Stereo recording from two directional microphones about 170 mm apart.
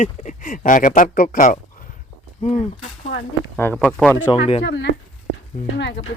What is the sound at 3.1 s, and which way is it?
Speech, 90° left.